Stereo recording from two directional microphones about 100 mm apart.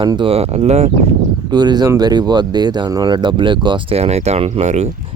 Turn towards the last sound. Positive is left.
turn(degrees=-90)